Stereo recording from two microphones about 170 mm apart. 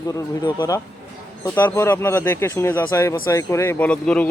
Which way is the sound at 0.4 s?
20° left (ahead or behind).